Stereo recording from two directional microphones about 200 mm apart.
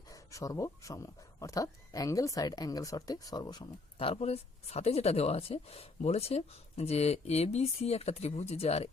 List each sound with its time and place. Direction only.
0.1 s speech: 15° left (ahead or behind); by 8.9 s 30° left (ahead or behind)